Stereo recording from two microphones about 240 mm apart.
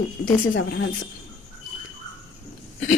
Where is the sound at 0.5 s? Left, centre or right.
Left.